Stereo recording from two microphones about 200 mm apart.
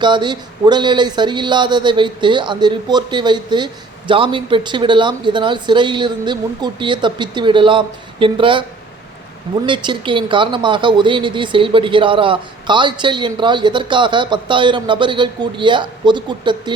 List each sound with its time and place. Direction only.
0.0 s speech: 20° right (ahead or behind)
9.6 s speech: 25° right (ahead or behind)